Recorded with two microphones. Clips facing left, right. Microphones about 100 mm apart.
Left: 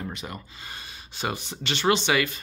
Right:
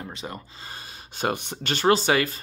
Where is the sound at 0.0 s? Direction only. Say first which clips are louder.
Even; 30° right (ahead or behind).